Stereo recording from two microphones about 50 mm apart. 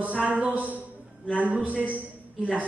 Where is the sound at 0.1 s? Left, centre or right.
Right.